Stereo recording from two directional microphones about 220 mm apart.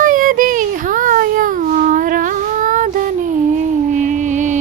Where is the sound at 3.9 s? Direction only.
35° right (ahead or behind).